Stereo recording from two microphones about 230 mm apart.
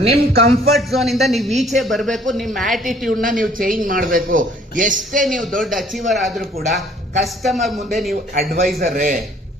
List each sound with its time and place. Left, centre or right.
0.2 s a man's voice: right
0.8 s a woman's voice: centre
3.2 s a man's voice: right
5.2 s a woman's voice: centre
8.4 s a man's voice: right